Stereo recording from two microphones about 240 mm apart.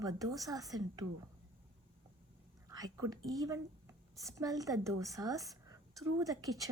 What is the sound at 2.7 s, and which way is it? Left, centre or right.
A woman's voice, centre.